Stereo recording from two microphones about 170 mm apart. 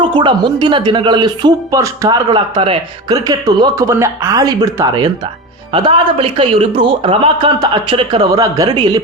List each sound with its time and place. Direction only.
0.0 s a man's voice: 30° right (ahead or behind)